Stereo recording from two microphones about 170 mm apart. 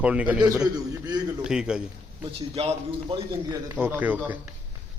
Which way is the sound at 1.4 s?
5° right (ahead or behind).